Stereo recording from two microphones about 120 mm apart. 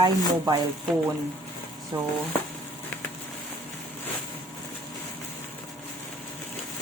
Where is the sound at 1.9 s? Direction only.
30° right (ahead or behind).